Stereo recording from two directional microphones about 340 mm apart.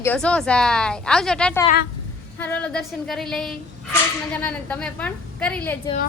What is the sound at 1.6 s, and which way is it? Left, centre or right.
Speech, left.